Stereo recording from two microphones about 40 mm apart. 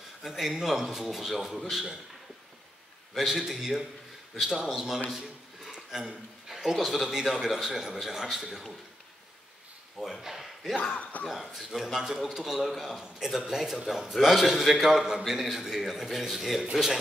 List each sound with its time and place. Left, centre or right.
0.2 s speech: centre
3.2 s a man's voice: centre
5.1 s a sound: centre
6.5 s a man's voice: centre
9.9 s speech: centre
11.0 s speech: left
11.2 s a man's voice: centre